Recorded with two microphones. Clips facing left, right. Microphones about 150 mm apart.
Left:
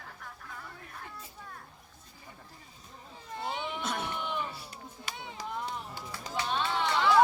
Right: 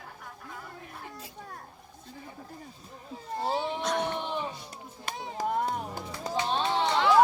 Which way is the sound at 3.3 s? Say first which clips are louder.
Right 6 dB; 35° right (ahead or behind).